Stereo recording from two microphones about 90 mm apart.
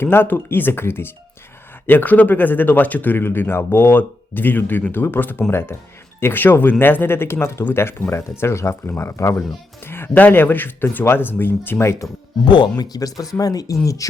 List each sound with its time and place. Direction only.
0.0 s speech: 25° left (ahead or behind)
12.5 s speech: 60° left (ahead or behind); by 14.1 s 40° left (ahead or behind)